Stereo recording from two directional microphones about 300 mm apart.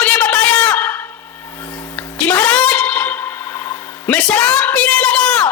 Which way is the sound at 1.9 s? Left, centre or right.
Centre.